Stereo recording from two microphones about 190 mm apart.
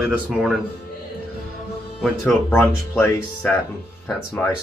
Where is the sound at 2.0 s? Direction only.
10° left (ahead or behind).